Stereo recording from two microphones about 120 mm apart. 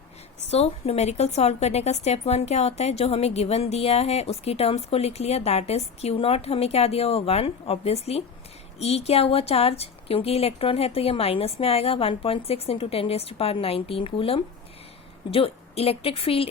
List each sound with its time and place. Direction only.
0.4 s a woman's voice: 60° left (ahead or behind)